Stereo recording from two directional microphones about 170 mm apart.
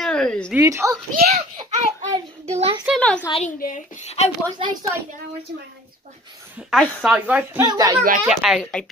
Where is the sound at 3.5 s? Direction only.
50° left (ahead or behind).